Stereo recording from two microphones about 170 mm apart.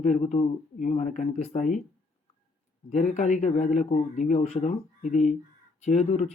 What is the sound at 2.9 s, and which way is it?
Speech, 45° left (ahead or behind).